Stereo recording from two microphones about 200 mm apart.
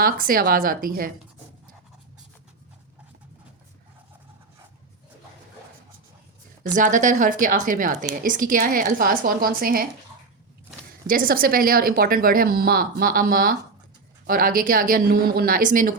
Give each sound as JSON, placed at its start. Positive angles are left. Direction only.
{"t": 0.0, "sound": "speech", "side_deg": -45}
{"t": 6.7, "sound": "a woman's voice", "side_deg": -40}
{"t": 11.0, "sound": "speech", "side_deg": -45}